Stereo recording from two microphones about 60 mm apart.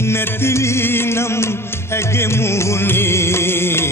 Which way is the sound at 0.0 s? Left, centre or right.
Left.